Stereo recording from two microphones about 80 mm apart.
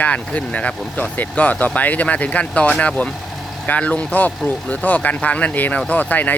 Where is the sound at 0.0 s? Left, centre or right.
Centre.